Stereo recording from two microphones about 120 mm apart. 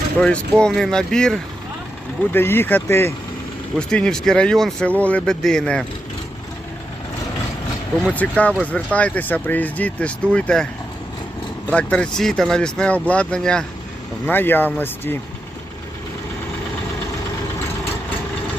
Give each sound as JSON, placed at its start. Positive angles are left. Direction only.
{"t": 0.2, "sound": "speech", "side_deg": 5}
{"t": 2.3, "sound": "speech", "side_deg": 20}
{"t": 3.8, "sound": "speech", "side_deg": 5}
{"t": 8.1, "sound": "speech", "side_deg": 10}
{"t": 11.7, "sound": "speech", "side_deg": 10}